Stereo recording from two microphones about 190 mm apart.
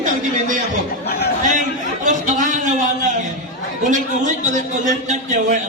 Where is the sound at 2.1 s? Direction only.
40° right (ahead or behind).